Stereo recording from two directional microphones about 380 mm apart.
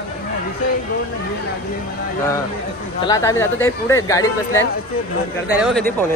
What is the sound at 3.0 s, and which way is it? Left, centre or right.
Speech, centre.